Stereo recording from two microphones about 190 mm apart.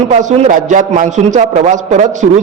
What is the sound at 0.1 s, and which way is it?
A man's voice, 40° right (ahead or behind).